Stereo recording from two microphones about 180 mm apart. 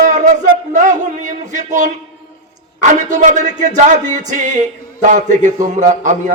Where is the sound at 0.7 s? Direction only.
45° right (ahead or behind).